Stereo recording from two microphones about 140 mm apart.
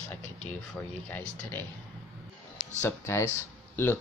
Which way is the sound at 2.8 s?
20° left (ahead or behind).